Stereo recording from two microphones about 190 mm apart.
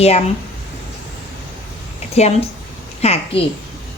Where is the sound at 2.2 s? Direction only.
35° left (ahead or behind).